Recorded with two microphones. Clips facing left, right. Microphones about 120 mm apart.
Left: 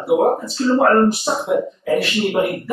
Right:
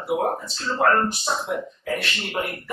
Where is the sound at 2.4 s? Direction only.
15° left (ahead or behind).